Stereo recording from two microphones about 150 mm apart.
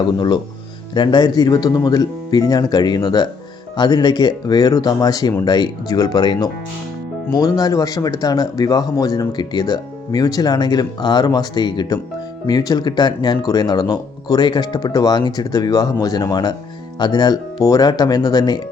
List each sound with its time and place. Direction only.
0.0 s speech: 30° left (ahead or behind)